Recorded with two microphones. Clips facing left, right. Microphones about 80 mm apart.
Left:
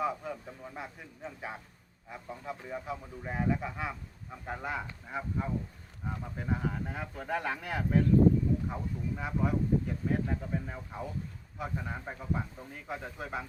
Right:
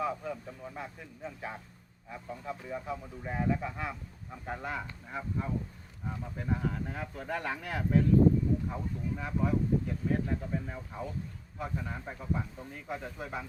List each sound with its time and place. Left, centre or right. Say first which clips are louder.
0.0 s speech: even; centre